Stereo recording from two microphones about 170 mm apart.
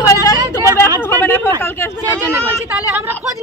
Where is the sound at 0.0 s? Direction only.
20° left (ahead or behind).